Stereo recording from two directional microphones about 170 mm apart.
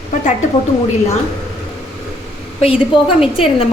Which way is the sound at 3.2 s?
Centre (ahead or behind).